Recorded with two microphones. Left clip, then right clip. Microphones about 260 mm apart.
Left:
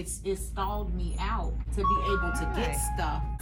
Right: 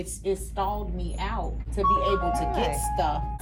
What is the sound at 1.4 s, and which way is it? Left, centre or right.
A woman's voice, centre.